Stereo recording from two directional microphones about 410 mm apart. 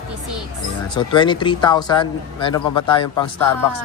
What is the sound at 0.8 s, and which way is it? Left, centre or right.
Speech, centre.